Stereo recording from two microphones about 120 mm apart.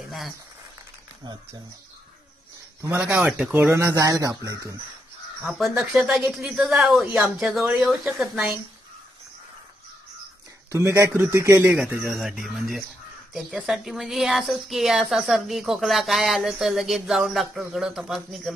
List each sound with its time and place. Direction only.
2.8 s speech: 15° right (ahead or behind)
3.7 s a man's voice: 25° right (ahead or behind)
5.4 s a woman's voice: 5° right (ahead or behind)
10.7 s a man's voice: 25° right (ahead or behind); by 18.5 s 5° right (ahead or behind)